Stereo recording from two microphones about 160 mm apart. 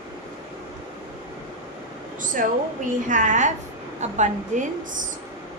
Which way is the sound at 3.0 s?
50° right (ahead or behind).